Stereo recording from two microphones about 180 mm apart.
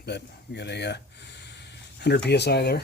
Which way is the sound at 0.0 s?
70° left (ahead or behind).